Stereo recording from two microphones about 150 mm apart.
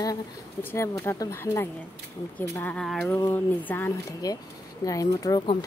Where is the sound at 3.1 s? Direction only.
15° left (ahead or behind).